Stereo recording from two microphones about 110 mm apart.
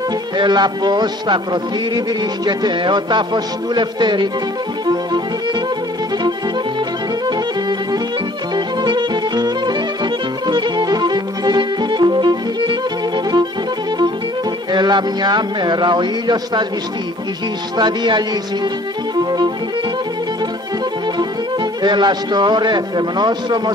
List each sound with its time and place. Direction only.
0.4 s a man's voice: 40° right (ahead or behind)
4.8 s music: 40° right (ahead or behind)
8.5 s music: 45° right (ahead or behind)
14.7 s a man's voice: 40° right (ahead or behind)
17.7 s a man's voice: 40° right (ahead or behind)
21.8 s a man's voice: 40° right (ahead or behind)